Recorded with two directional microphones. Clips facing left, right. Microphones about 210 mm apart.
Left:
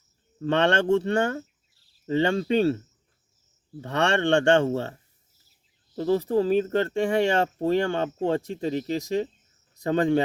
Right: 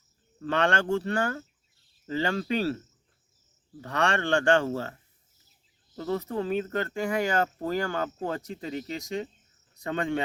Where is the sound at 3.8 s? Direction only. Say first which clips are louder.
Left 4 dB; 25° left (ahead or behind).